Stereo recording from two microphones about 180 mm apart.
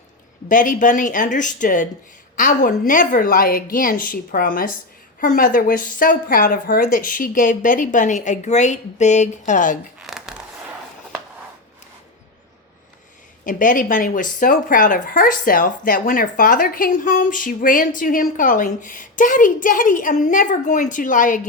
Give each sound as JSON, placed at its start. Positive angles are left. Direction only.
{"t": 0.4, "sound": "speech", "side_deg": 45}
{"t": 10.0, "sound": "a sound", "side_deg": 0}
{"t": 13.4, "sound": "speech", "side_deg": 50}